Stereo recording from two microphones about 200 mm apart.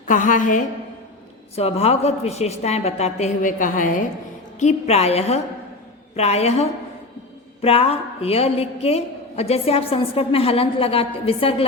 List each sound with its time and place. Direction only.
0.1 s a woman's voice: 40° left (ahead or behind)